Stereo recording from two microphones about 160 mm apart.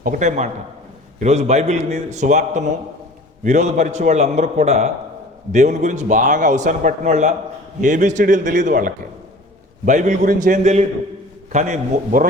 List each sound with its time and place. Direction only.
0.0 s a man's voice: 55° right (ahead or behind)